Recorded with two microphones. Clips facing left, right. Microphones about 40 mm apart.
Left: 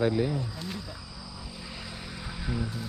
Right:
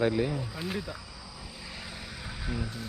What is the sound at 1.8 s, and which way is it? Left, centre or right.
Vehicle, centre.